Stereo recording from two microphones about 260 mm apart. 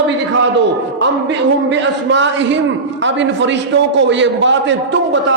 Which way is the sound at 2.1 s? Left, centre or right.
Right.